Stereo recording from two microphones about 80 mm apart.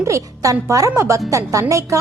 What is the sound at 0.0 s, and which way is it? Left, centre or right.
A woman's voice, right.